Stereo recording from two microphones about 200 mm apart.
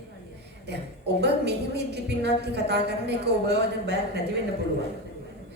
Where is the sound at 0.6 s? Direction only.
55° right (ahead or behind).